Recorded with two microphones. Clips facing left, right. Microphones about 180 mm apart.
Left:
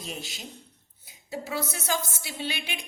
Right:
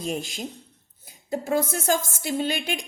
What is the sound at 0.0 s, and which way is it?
A woman's voice, 45° right (ahead or behind).